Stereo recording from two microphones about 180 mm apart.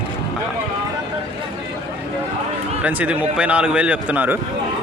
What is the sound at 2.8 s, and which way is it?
Speech, 10° right (ahead or behind).